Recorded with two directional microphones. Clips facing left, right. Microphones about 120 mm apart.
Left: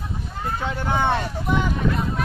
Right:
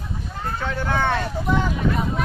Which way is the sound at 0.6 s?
15° left (ahead or behind).